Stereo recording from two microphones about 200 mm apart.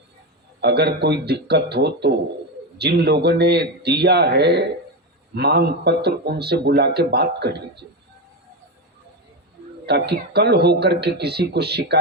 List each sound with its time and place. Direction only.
0.6 s a man's voice: 55° right (ahead or behind)
9.8 s a man's voice: 55° right (ahead or behind)